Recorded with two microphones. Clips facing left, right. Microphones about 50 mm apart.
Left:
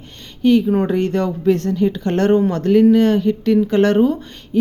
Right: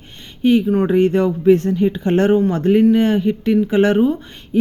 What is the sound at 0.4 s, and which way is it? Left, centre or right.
Speech, centre.